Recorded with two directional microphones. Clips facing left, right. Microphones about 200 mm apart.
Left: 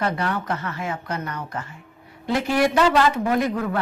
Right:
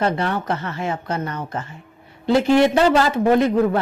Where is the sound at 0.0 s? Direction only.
25° right (ahead or behind).